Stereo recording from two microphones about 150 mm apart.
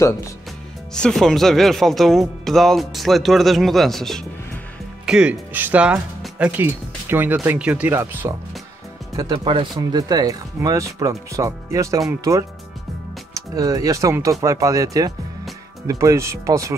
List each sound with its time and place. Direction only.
0.9 s speech: 5° left (ahead or behind); by 8.3 s 15° right (ahead or behind)
9.1 s speech: 25° right (ahead or behind)